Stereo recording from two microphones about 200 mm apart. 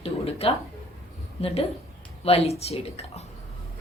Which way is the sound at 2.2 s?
30° left (ahead or behind).